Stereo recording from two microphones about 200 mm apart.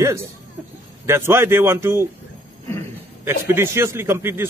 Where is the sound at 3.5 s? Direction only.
10° right (ahead or behind).